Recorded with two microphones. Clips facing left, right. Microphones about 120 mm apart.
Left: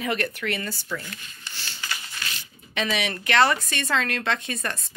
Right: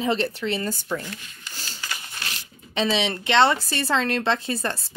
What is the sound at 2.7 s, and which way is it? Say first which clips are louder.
Speech: right 4 dB; 30° right (ahead or behind).